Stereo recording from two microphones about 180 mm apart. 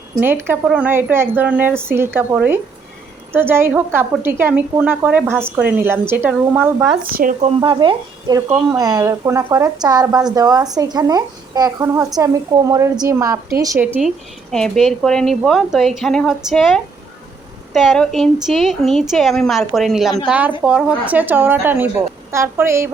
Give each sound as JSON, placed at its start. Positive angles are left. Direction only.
{"t": 0.2, "sound": "a woman's voice", "side_deg": -10}
{"t": 7.1, "sound": "speech", "side_deg": -50}
{"t": 7.4, "sound": "a woman's voice", "side_deg": -30}
{"t": 14.5, "sound": "a woman's voice", "side_deg": 5}